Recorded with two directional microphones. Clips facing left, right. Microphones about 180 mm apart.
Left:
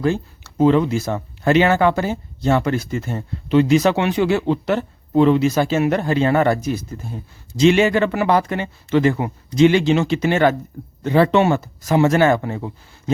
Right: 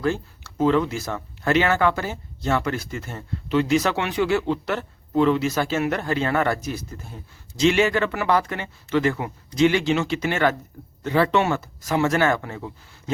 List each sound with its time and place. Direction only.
0.0 s speech: 20° left (ahead or behind)